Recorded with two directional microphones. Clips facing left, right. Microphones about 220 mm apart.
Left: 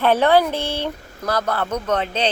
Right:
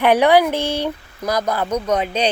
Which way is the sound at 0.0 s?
15° right (ahead or behind).